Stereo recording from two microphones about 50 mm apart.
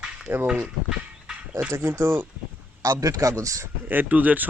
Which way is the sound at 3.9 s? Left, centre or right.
Right.